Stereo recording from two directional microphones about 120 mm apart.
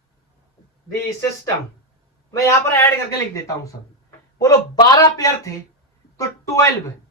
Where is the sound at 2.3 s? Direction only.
20° left (ahead or behind).